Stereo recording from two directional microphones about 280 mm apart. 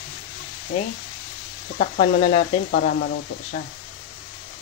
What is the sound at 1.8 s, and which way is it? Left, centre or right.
Speech, left.